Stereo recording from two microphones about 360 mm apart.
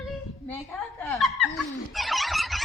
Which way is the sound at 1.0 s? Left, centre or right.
Centre.